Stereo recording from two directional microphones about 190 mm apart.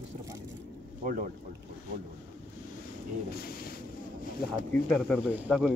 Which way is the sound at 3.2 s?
55° left (ahead or behind).